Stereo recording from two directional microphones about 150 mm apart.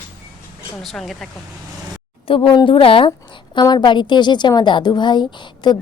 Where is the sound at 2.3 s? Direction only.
35° left (ahead or behind).